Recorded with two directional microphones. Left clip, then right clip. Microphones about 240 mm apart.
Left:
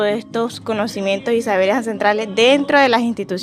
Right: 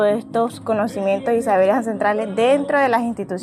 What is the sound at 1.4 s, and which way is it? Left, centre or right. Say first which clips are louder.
Speech: right 2 dB; left.